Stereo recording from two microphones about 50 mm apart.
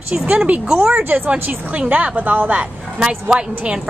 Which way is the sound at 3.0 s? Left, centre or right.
Centre.